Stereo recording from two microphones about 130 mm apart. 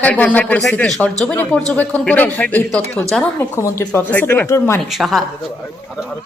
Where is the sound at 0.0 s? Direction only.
10° left (ahead or behind).